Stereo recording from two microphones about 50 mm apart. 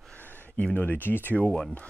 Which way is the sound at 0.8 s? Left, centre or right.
Left.